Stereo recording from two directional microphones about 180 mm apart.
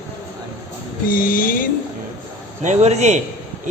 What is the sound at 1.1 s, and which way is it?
Speech, 50° left (ahead or behind).